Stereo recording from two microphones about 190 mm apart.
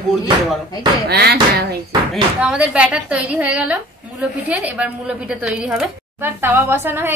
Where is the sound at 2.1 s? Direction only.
5° right (ahead or behind).